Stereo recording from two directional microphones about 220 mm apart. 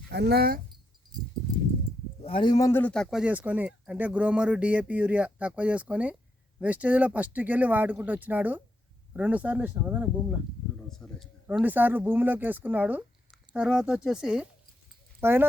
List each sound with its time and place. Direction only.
0.1 s speech: 50° right (ahead or behind)
2.2 s a man's voice: 20° left (ahead or behind); by 15.4 s 10° right (ahead or behind)